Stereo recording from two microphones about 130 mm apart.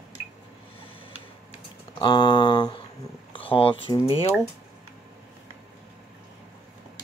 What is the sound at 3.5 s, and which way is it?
Speech, 45° left (ahead or behind).